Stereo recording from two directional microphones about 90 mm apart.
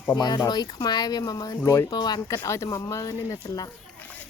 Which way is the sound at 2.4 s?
35° left (ahead or behind).